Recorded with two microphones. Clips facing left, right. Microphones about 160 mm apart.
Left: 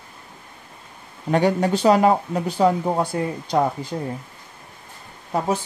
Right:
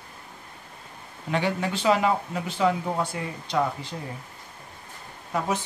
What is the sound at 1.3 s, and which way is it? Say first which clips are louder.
Speech: left 8 dB; 45° left (ahead or behind).